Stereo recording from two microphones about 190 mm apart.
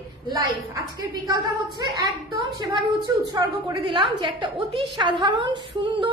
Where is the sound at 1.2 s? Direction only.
20° right (ahead or behind).